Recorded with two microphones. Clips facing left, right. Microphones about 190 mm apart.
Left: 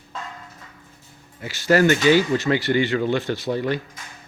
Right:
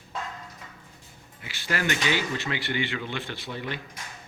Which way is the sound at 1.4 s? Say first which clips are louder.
Left 13 dB; 40° left (ahead or behind).